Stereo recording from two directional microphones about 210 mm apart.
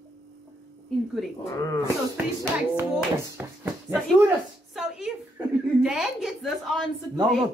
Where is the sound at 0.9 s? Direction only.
Centre (ahead or behind).